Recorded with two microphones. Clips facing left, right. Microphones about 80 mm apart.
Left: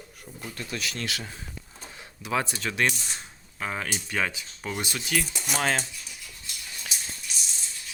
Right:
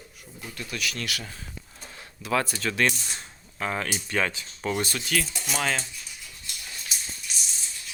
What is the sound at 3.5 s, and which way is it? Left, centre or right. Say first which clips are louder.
Speech: right 2 dB; centre.